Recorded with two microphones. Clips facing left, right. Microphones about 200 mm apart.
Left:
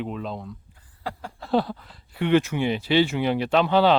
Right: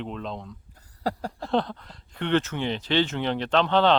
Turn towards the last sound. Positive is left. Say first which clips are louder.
# left 2 dB
turn(degrees=10)  # may be behind; listen again after turning